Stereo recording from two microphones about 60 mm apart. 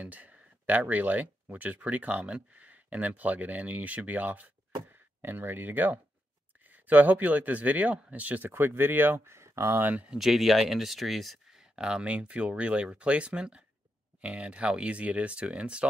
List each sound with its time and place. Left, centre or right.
0.0 s speech: right
10.1 s speech: centre
11.6 s speech: centre